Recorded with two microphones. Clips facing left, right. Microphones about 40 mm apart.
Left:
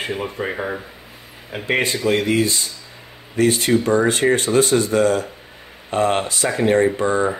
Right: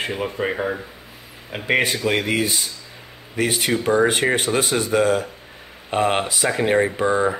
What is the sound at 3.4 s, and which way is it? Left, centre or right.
Speech, centre.